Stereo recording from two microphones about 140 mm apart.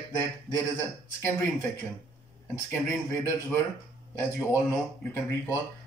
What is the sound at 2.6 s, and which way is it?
A man's voice, 15° left (ahead or behind).